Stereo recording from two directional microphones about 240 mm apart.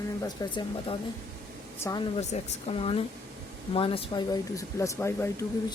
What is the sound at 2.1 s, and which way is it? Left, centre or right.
Speech, left.